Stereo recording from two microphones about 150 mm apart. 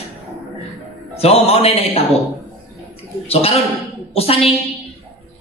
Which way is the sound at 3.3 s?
40° left (ahead or behind).